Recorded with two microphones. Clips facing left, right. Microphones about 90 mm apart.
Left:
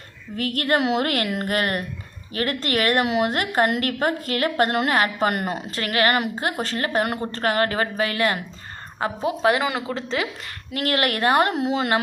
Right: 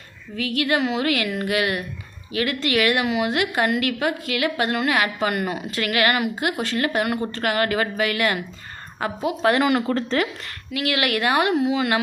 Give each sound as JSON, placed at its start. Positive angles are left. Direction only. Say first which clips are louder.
{"t": 0.3, "sound": "a woman's voice", "louder": "even", "side_deg": 50}
{"t": 10.8, "sound": "a woman's voice", "louder": "even", "side_deg": 40}